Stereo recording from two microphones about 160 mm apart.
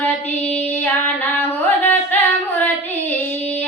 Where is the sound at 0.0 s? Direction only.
10° left (ahead or behind).